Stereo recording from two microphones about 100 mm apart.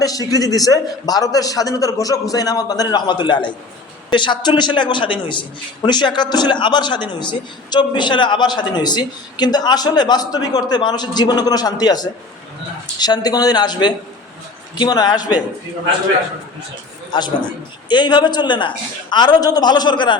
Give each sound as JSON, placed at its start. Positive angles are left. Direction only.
{"t": 0.0, "sound": "a man's voice", "side_deg": 35}
{"t": 17.1, "sound": "a man's voice", "side_deg": 50}